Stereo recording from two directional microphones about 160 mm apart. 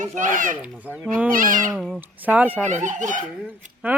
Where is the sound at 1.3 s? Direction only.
60° right (ahead or behind).